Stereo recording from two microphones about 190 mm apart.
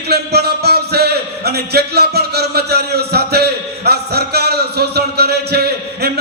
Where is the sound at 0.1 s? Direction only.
55° right (ahead or behind).